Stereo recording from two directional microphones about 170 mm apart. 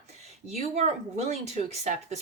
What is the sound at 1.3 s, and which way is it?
Speech, 40° right (ahead or behind).